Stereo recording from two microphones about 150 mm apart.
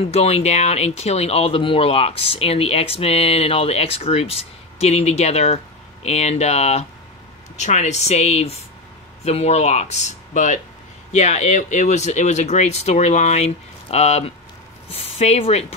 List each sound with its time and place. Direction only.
0.0 s speech: 45° left (ahead or behind)